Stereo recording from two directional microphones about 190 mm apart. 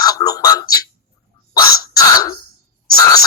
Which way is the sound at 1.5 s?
20° left (ahead or behind).